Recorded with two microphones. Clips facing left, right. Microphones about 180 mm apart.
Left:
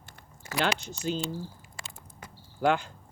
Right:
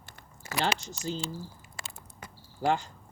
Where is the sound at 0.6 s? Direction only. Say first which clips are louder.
Left 2 dB; 60° left (ahead or behind).